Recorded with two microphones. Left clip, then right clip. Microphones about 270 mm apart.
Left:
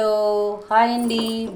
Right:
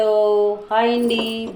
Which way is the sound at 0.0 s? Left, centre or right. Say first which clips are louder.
Right 3 dB; left.